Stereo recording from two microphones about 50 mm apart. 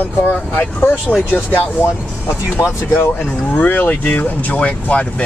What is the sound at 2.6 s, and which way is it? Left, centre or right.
Speech, left.